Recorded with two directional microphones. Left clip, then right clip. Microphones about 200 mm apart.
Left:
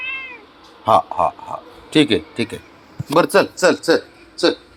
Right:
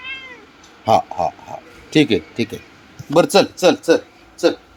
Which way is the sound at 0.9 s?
20° right (ahead or behind).